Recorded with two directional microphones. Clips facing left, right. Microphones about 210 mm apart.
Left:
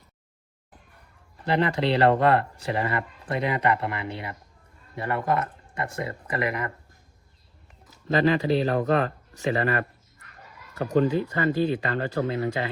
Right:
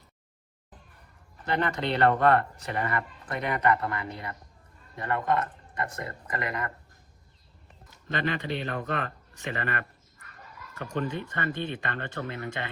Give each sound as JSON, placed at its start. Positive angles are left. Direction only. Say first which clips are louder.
{"t": 1.5, "sound": "speech", "louder": "left 5 dB", "side_deg": 30}
{"t": 8.0, "sound": "speech", "louder": "left 9 dB", "side_deg": 35}